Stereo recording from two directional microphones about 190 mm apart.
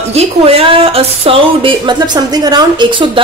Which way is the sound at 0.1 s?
30° right (ahead or behind).